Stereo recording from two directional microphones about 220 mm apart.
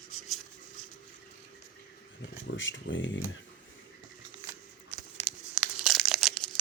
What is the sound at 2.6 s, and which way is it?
Speech, 55° left (ahead or behind).